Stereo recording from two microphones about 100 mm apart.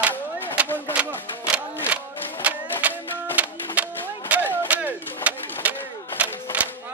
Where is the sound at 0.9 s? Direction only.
15° right (ahead or behind).